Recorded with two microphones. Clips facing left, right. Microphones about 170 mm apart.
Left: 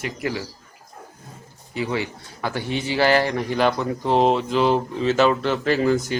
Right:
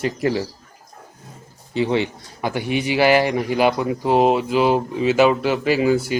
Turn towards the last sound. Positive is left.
turn(degrees=-10)  # may be behind; listen again after turning